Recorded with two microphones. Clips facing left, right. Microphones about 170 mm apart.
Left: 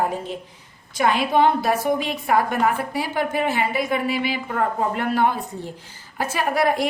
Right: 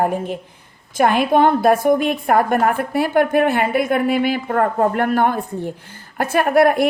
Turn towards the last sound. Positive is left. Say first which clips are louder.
# right 7 dB
turn(degrees=-55)  # may be behind; listen again after turning